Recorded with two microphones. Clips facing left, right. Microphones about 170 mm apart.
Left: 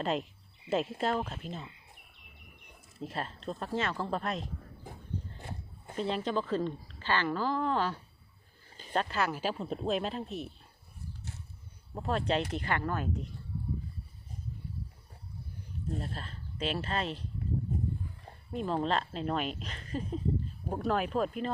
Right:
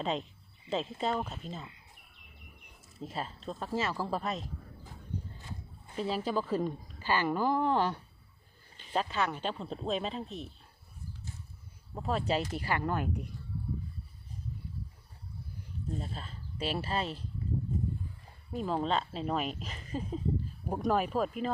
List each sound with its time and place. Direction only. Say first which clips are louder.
0.0 s speech: left 2 dB; centre (ahead or behind)
3.0 s speech: left 1 dB; centre (ahead or behind)
6.0 s a woman's voice: even; 5° right (ahead or behind)
8.9 s speech: left 1 dB; centre (ahead or behind)
11.9 s a woman's voice: left 1 dB; centre (ahead or behind)
16.0 s speech: left 1 dB; centre (ahead or behind)
18.5 s speech: even; centre (ahead or behind)